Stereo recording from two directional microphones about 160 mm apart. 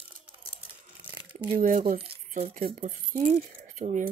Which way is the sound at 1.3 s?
50° right (ahead or behind).